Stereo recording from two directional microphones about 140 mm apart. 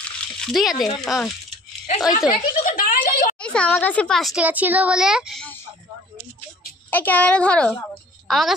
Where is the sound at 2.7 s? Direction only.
90° left.